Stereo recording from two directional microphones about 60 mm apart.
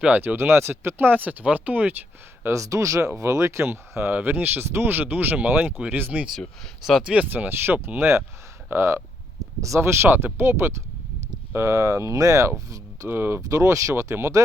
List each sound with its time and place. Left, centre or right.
0.3 s speech: right
2.5 s speech: right
4.1 s speech: right
7.3 s speech: right
9.6 s speech: right
9.8 s speech: right
11.5 s speech: right
13.1 s speech: right
13.5 s speech: right